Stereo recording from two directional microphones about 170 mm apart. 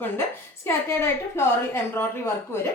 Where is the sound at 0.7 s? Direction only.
15° left (ahead or behind).